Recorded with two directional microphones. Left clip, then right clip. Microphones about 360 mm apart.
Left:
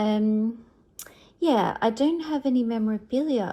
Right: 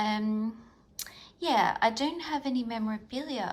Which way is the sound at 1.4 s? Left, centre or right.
Centre.